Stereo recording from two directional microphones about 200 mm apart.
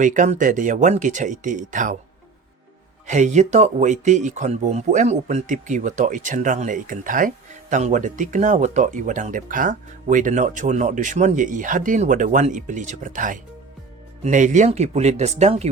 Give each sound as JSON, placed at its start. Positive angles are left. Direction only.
{"t": 0.0, "sound": "speech", "side_deg": -40}
{"t": 3.1, "sound": "speech", "side_deg": -35}